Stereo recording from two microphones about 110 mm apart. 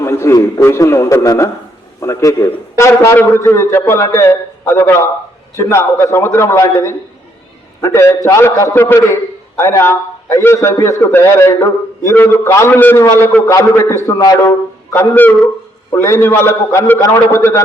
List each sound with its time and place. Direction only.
0.0 s a man's voice: 25° left (ahead or behind)
15.9 s a man's voice: 25° left (ahead or behind)